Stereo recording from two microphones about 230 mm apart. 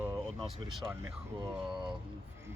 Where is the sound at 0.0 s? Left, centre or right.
Centre.